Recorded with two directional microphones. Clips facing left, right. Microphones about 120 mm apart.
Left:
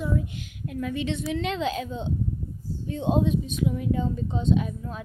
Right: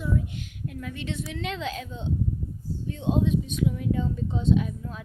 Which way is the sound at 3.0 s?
40° left (ahead or behind).